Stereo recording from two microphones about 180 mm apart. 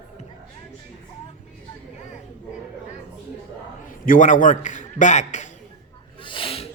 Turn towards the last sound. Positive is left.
turn(degrees=30)  # may be behind; listen again after turning